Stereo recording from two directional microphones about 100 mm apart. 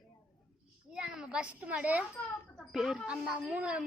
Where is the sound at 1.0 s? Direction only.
10° right (ahead or behind).